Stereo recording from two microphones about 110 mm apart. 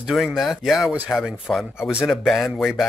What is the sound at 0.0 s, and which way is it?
Speech, centre (ahead or behind).